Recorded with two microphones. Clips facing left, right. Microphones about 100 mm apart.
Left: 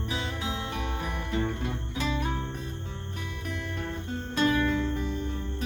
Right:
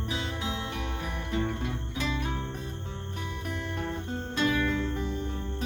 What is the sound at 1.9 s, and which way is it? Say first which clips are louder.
Music: left 2 dB; 35° left (ahead or behind).